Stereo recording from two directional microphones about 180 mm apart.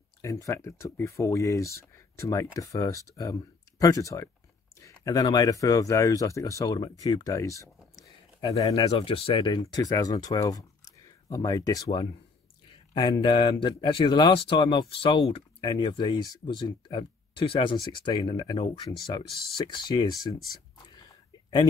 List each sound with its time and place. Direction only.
0.2 s speech: 15° left (ahead or behind)
8.9 s speech: 30° left (ahead or behind)
20.7 s whispering: 25° left (ahead or behind)